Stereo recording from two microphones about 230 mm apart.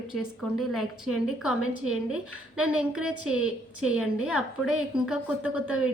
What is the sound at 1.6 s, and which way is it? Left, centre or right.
Speech, left.